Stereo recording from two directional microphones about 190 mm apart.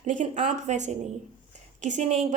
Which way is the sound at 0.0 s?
40° right (ahead or behind).